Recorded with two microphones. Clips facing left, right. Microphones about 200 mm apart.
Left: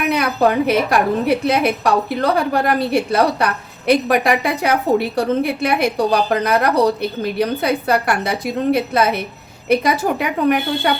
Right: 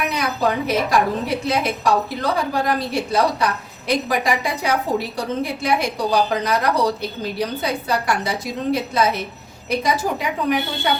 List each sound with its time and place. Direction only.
0.1 s a woman's voice: 60° left (ahead or behind)